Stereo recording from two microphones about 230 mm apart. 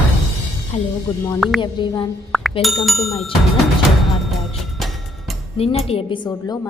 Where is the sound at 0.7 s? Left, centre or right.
Left.